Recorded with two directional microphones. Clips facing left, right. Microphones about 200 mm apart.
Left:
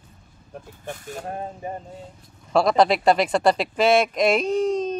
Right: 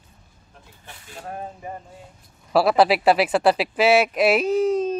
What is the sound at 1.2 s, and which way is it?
Speech, 25° left (ahead or behind).